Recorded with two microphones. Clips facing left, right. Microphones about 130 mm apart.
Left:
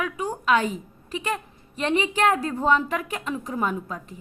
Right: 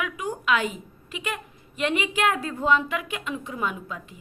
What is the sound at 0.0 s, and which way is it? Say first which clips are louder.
A woman's voice: left 2 dB; 35° left (ahead or behind).